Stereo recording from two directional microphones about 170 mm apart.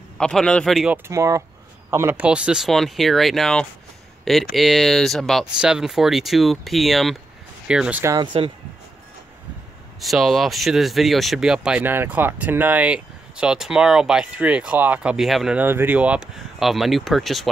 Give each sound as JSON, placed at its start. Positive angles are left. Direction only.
{"t": 0.2, "sound": "speech", "side_deg": 5}
{"t": 0.9, "sound": "speech", "side_deg": -15}
{"t": 8.0, "sound": "speech", "side_deg": -20}
{"t": 9.9, "sound": "speech", "side_deg": 0}